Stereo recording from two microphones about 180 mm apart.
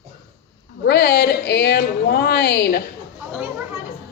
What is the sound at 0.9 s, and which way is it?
A woman's voice, 65° left (ahead or behind).